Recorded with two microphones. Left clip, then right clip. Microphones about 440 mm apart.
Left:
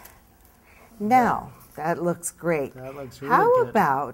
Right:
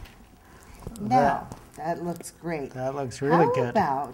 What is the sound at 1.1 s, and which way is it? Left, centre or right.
Speech, left.